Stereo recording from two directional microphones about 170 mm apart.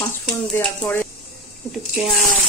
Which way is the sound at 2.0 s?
5° right (ahead or behind).